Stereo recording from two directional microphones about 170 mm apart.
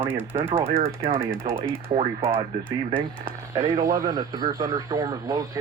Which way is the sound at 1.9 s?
35° right (ahead or behind).